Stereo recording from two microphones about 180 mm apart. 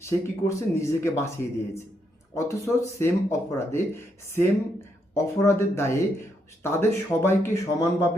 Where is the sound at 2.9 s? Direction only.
15° left (ahead or behind).